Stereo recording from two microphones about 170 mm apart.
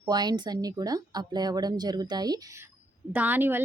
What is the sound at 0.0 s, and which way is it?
Speech, 25° right (ahead or behind).